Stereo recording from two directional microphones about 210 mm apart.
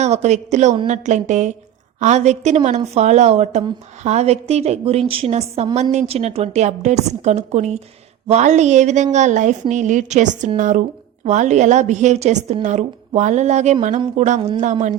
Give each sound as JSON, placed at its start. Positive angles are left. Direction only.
{"t": 0.0, "sound": "a woman's voice", "side_deg": -35}